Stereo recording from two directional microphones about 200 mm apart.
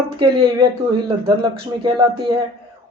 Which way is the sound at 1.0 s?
25° right (ahead or behind).